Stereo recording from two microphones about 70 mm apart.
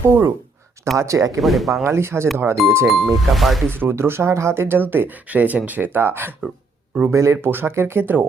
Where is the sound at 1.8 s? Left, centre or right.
Right.